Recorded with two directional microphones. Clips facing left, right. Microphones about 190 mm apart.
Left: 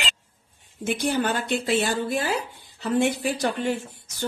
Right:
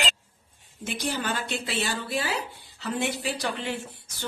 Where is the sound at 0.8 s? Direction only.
50° left (ahead or behind).